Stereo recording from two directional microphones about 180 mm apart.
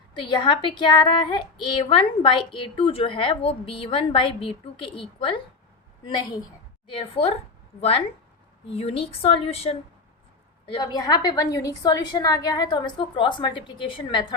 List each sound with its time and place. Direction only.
0.1 s a woman's voice: 30° left (ahead or behind)
6.8 s a woman's voice: 30° left (ahead or behind)
8.7 s a woman's voice: 35° left (ahead or behind)
10.7 s a woman's voice: 20° left (ahead or behind)